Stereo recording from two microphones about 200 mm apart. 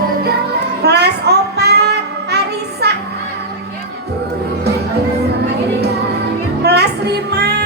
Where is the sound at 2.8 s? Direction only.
55° right (ahead or behind).